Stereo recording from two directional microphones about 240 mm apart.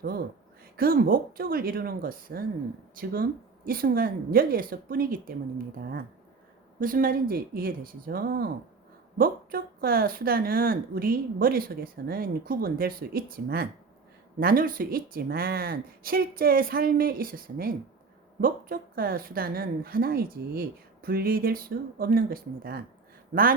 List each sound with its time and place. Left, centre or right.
0.8 s speech: right